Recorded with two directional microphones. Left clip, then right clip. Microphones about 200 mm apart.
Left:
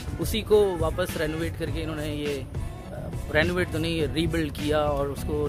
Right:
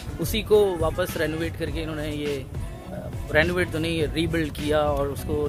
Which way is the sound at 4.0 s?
20° left (ahead or behind).